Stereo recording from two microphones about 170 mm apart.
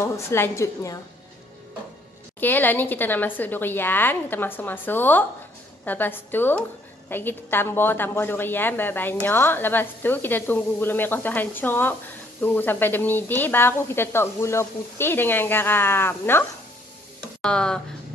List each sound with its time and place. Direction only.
0.0 s a woman's voice: 15° left (ahead or behind)
2.4 s a woman's voice: 10° left (ahead or behind)